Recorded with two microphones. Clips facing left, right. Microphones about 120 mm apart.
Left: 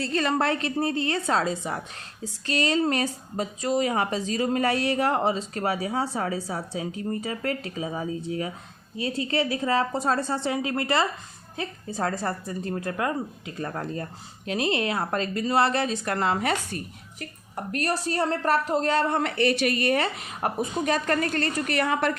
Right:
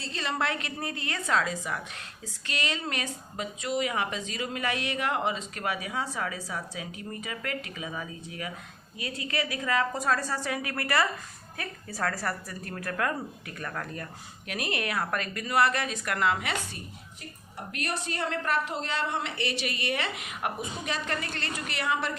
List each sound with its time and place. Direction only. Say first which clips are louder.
0.0 s a woman's voice: left 7 dB; 50° left (ahead or behind)
17.7 s a woman's voice: left 7 dB; 40° left (ahead or behind)